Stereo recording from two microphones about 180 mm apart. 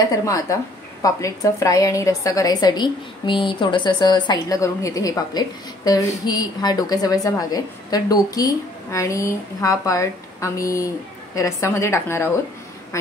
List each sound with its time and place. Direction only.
0.0 s a woman's voice: 20° left (ahead or behind)